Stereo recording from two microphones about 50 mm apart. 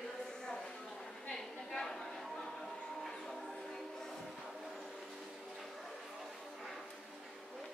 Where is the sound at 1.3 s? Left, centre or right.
Centre.